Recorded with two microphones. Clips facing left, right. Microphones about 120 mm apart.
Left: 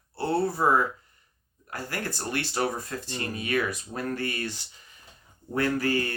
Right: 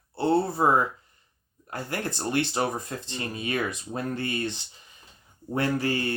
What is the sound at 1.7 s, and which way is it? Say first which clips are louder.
Speech: right 2 dB; 20° right (ahead or behind).